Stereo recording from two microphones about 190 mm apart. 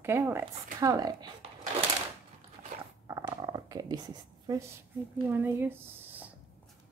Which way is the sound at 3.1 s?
20° right (ahead or behind).